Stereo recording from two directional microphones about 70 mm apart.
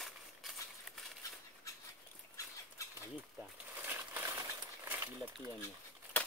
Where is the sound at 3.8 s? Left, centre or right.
Right.